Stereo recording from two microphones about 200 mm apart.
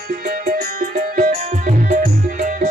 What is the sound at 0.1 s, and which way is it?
Music, 45° right (ahead or behind).